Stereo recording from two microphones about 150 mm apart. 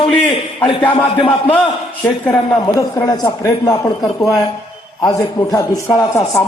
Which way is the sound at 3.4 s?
20° left (ahead or behind).